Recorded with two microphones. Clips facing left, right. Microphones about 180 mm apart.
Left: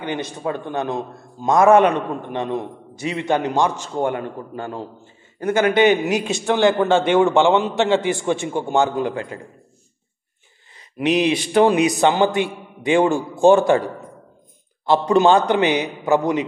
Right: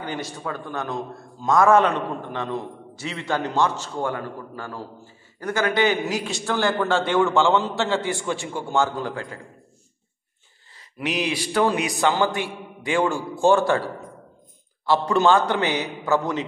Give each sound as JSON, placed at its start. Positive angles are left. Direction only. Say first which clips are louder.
{"t": 0.0, "sound": "a man's voice", "louder": "left 5 dB", "side_deg": 20}
{"t": 10.7, "sound": "a man's voice", "louder": "left 8 dB", "side_deg": 20}
{"t": 14.9, "sound": "a man's voice", "louder": "left 4 dB", "side_deg": 20}